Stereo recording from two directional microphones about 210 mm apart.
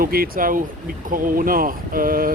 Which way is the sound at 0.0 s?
45° right (ahead or behind).